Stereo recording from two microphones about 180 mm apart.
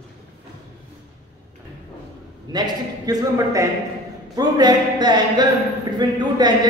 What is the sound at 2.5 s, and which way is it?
A man's voice, 20° right (ahead or behind).